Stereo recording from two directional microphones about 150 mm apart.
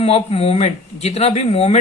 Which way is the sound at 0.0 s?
45° left (ahead or behind).